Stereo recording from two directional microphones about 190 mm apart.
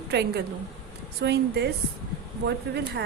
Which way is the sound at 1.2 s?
60° right (ahead or behind).